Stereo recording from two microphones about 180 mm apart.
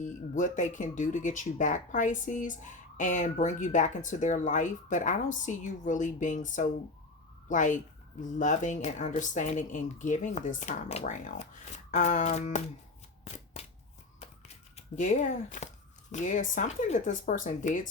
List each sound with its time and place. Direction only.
0.0 s speech: 45° left (ahead or behind)
11.9 s music: 45° left (ahead or behind)
13.2 s shuffling cards: 35° left (ahead or behind)
14.2 s a sound: 40° left (ahead or behind)
16.1 s speech: 45° left (ahead or behind)